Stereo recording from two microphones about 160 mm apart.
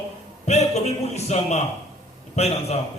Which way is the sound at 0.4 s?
45° left (ahead or behind).